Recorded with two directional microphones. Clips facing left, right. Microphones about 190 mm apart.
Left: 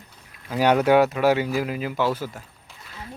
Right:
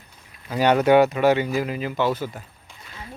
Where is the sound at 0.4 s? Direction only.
5° left (ahead or behind).